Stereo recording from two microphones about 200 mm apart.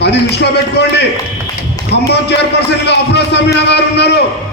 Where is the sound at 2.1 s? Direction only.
60° left (ahead or behind).